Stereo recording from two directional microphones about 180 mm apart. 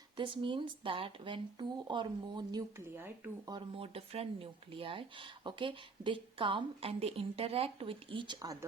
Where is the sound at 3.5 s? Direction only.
30° right (ahead or behind).